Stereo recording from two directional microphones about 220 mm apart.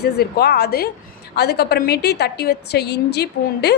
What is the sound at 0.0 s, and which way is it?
A woman's voice, 45° left (ahead or behind).